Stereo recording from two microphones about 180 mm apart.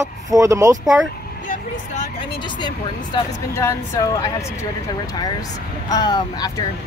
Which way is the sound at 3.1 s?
15° left (ahead or behind).